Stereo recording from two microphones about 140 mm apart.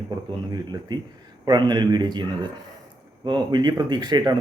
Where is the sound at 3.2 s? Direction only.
30° right (ahead or behind).